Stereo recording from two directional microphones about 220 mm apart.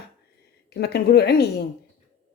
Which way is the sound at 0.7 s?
45° left (ahead or behind).